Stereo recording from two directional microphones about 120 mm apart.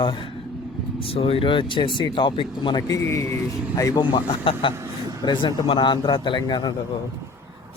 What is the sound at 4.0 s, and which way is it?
Speech, 45° left (ahead or behind).